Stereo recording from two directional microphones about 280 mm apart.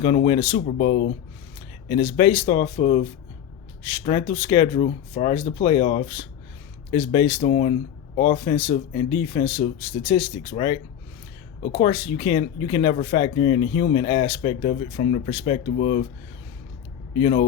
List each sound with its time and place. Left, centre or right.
0.0 s speech: left
17.2 s speech: left